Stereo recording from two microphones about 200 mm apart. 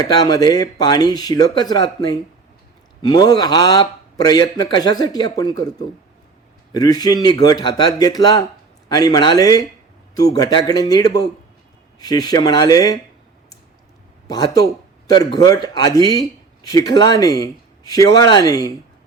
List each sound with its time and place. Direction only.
0.0 s a man's voice: 20° left (ahead or behind)
14.3 s a man's voice: 20° left (ahead or behind)